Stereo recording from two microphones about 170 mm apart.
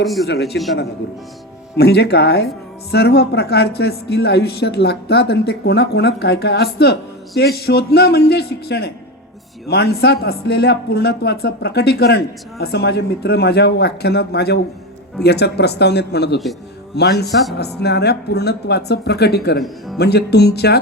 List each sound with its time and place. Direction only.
0.0 s a man's voice: centre (ahead or behind)
0.3 s speech: 75° left (ahead or behind)
1.7 s speech: 70° left (ahead or behind)